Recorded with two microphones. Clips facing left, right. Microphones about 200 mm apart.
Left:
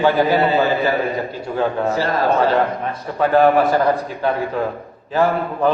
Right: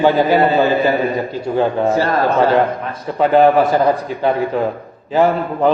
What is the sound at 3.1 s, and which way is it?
Speech, 15° right (ahead or behind).